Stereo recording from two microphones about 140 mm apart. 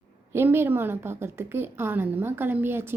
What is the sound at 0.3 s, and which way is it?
A woman's voice, 15° right (ahead or behind).